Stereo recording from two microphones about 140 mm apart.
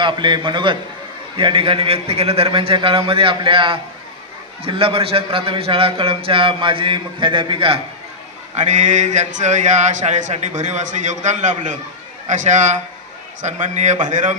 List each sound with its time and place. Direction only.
0.0 s a man's voice: 35° right (ahead or behind)
8.5 s speech: 60° right (ahead or behind)